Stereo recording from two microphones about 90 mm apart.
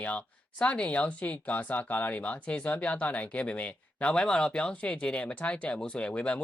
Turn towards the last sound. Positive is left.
turn(degrees=15)  # may be behind; listen again after turning